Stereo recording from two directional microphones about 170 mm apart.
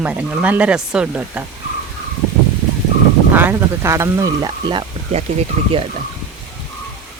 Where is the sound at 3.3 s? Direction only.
10° right (ahead or behind).